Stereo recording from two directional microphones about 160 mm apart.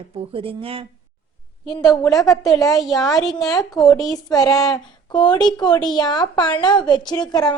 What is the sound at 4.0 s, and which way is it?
A woman's voice, 25° left (ahead or behind).